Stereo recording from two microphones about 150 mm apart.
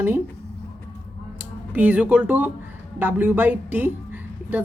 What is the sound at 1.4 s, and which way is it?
A woman's voice, 10° right (ahead or behind).